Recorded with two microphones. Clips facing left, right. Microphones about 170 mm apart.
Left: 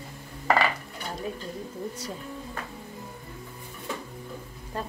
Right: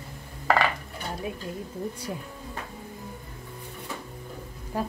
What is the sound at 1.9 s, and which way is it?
Speech, 10° right (ahead or behind).